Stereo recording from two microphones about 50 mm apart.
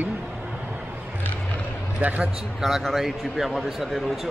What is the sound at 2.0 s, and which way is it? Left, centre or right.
Speech, right.